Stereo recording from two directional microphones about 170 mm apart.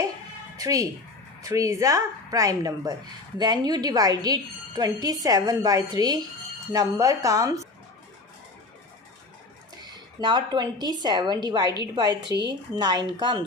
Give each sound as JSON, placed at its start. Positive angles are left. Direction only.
{"t": 0.5, "sound": "a woman's voice", "side_deg": -20}
{"t": 10.2, "sound": "a woman's voice", "side_deg": -25}